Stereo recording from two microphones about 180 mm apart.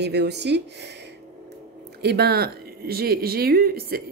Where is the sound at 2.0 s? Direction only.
60° right (ahead or behind).